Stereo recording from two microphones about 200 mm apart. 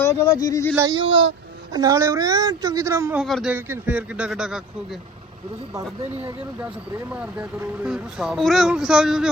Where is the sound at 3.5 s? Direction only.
10° right (ahead or behind).